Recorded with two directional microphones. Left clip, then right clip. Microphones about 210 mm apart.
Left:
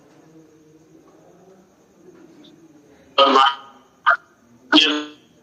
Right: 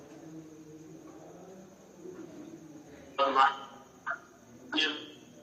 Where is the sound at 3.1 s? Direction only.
50° left (ahead or behind).